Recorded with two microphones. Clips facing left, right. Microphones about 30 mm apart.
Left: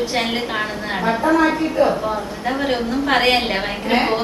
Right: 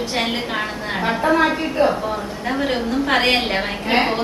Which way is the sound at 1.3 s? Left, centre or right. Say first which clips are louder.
Left 1 dB; right.